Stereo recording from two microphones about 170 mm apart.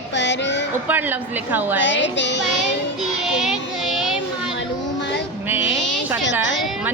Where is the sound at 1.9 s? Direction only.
90° left.